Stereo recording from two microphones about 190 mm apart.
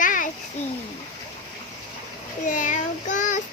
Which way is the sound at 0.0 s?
45° left (ahead or behind).